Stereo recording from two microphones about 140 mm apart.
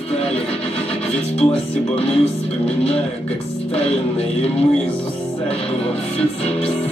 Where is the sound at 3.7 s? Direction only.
45° left (ahead or behind).